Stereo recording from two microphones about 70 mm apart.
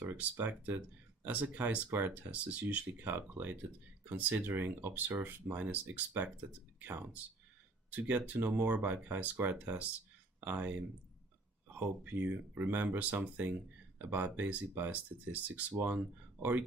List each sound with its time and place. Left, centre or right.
0.0 s speech: right